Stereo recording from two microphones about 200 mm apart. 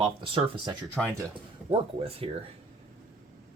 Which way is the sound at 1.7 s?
30° right (ahead or behind).